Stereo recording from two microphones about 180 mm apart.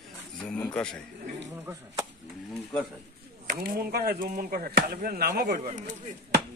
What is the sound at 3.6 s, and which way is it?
Speech, 55° right (ahead or behind).